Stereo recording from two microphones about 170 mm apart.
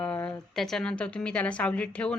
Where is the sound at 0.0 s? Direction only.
10° left (ahead or behind).